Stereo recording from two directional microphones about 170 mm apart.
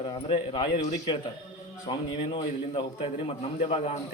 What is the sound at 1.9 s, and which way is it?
A man's voice, 30° left (ahead or behind).